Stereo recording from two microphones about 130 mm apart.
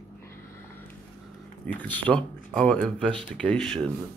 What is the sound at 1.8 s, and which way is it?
Speech, 10° left (ahead or behind).